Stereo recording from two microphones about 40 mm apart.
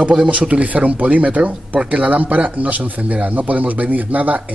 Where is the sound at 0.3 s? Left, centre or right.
Right.